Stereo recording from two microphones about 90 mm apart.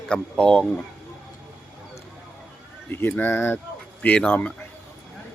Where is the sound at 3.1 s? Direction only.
20° left (ahead or behind).